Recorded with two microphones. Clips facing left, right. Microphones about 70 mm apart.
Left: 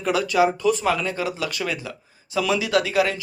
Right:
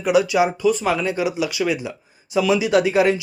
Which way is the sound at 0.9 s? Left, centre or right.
Centre.